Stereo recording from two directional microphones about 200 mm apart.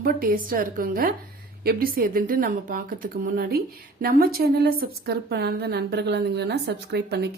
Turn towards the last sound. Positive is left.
turn(degrees=-55)  # may be behind; listen again after turning